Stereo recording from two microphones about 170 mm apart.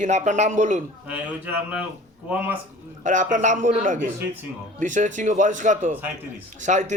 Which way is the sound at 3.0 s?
50° right (ahead or behind).